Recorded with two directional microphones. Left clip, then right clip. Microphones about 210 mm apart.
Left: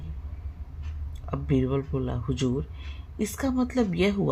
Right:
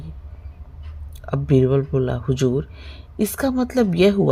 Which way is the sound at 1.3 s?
45° right (ahead or behind).